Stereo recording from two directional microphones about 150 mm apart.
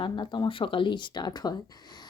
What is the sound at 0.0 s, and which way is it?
Speech, 30° left (ahead or behind).